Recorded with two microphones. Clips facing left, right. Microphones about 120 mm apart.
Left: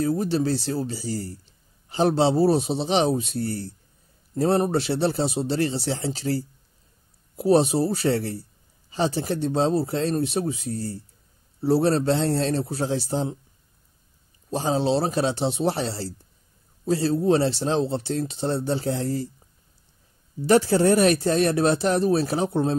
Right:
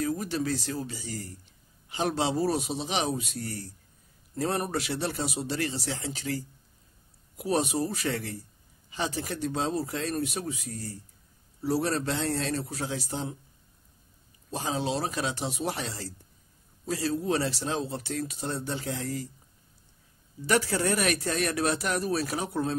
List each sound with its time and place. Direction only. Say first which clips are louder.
0.0 s speech: left 7 dB; 30° left (ahead or behind)
14.5 s speech: left 8 dB; 30° left (ahead or behind)
20.4 s speech: left 8 dB; 30° left (ahead or behind)